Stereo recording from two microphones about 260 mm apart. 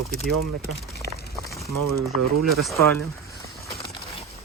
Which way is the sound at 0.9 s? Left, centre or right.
Left.